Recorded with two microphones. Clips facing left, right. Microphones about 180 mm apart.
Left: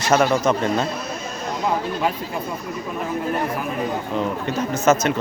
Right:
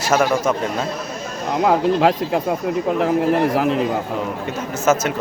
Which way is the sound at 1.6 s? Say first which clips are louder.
Right 7 dB; 90° right.